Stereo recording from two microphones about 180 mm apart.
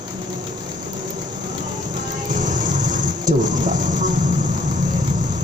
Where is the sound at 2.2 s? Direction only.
45° right (ahead or behind).